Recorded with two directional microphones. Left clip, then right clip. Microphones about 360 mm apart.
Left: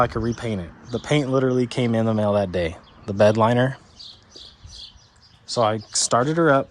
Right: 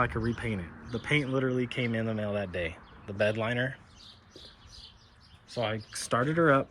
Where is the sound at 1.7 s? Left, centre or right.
Left.